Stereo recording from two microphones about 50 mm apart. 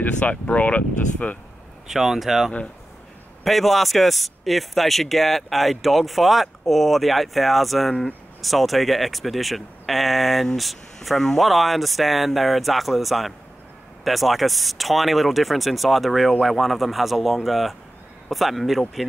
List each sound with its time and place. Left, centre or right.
0.2 s speech: left
1.9 s speech: centre